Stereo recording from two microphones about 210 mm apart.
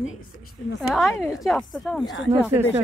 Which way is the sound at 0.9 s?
Centre (ahead or behind).